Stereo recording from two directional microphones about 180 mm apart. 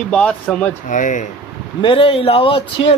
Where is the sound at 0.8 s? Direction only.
45° left (ahead or behind).